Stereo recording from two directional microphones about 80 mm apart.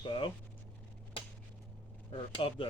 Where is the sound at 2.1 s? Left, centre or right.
Left.